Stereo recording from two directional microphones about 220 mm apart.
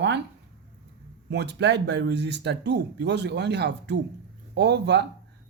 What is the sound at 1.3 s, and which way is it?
Speech, 50° right (ahead or behind).